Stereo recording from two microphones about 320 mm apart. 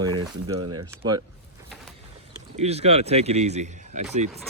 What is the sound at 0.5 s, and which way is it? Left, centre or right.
Speech, right.